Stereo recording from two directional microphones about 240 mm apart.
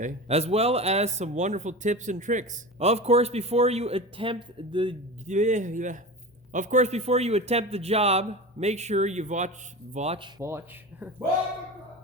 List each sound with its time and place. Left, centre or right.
0.0 s a man's voice: right